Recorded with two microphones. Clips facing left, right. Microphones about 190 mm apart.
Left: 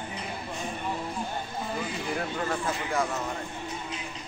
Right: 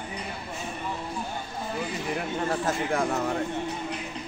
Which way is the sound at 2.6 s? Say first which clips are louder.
Right 3 dB; 55° right (ahead or behind).